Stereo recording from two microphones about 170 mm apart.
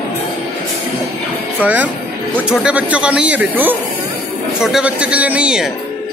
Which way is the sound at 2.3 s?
5° right (ahead or behind).